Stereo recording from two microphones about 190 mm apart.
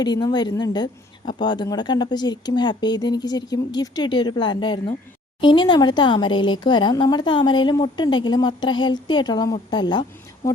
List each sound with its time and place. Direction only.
0.0 s speech: 20° left (ahead or behind)